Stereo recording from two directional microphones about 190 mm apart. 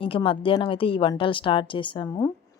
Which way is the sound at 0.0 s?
25° left (ahead or behind).